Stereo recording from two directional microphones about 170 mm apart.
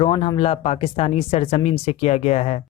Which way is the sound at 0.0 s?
30° left (ahead or behind).